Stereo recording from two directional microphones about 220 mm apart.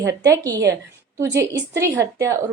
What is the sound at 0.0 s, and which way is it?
Speech, 15° right (ahead or behind).